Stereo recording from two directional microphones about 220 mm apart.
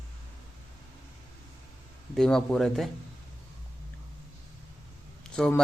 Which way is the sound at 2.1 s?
5° left (ahead or behind).